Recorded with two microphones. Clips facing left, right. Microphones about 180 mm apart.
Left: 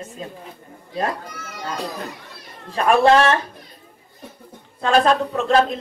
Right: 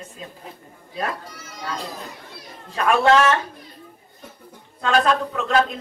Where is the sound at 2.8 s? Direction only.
30° left (ahead or behind).